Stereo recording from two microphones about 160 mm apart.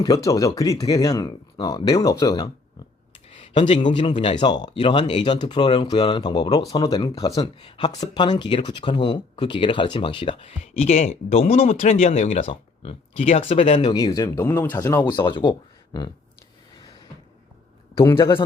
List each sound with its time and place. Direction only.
0.3 s speech: 20° left (ahead or behind)
3.3 s a sound: 30° left (ahead or behind)
3.9 s speech: 30° left (ahead or behind)
18.2 s speech: 30° left (ahead or behind)